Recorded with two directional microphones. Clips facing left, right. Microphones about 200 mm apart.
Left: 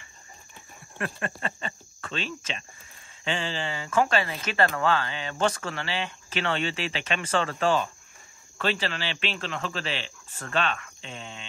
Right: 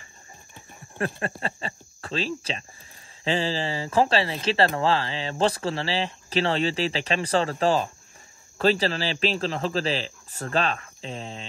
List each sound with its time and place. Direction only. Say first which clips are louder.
0.9 s speech: right 4 dB; 30° right (ahead or behind)